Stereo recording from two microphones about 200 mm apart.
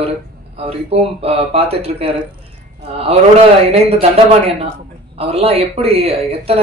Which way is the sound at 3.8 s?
30° right (ahead or behind).